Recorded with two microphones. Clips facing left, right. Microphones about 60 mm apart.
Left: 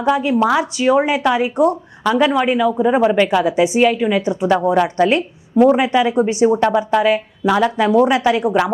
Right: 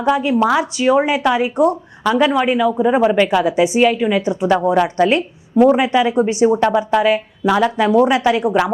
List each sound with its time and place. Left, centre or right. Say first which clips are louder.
0.0 s speech: even; right